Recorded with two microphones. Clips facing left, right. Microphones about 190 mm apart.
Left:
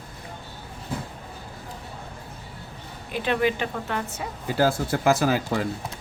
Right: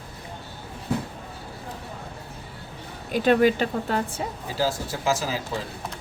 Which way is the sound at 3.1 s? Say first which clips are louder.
Right 5 dB; 40° right (ahead or behind).